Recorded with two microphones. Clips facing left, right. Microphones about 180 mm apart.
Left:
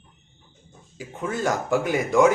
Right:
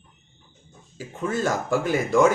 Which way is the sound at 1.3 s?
15° left (ahead or behind).